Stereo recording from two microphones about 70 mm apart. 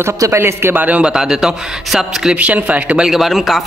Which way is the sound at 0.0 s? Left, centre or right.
Right.